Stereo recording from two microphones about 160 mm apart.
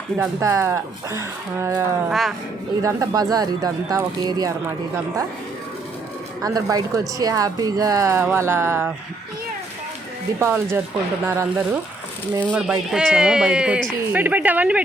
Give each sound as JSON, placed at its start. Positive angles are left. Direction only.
{"t": 0.2, "sound": "speech", "side_deg": -15}
{"t": 2.0, "sound": "speech", "side_deg": 0}
{"t": 2.8, "sound": "speech", "side_deg": -20}
{"t": 6.4, "sound": "speech", "side_deg": -25}
{"t": 10.4, "sound": "speech", "side_deg": -15}